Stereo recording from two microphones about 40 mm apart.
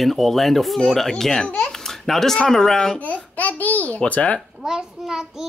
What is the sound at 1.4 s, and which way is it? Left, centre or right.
Speech, left.